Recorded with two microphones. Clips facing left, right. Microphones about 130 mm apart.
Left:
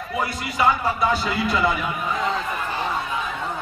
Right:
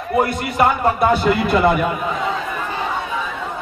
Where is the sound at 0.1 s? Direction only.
55° right (ahead or behind).